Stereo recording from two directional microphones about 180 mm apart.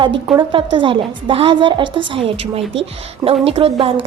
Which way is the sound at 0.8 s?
30° right (ahead or behind).